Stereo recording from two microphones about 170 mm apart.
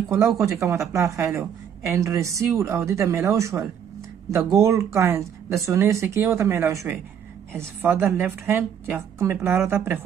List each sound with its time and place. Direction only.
0.4 s a woman's voice: 15° right (ahead or behind)